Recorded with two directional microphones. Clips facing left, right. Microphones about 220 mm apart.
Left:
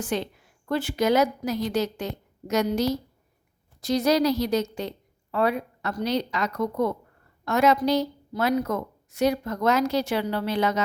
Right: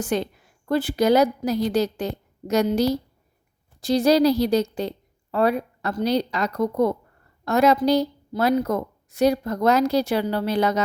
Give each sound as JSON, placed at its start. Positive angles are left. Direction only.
{"t": 0.0, "sound": "a woman's voice", "side_deg": -45}